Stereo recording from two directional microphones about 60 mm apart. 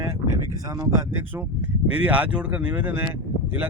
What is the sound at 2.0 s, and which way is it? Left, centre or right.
Speech, right.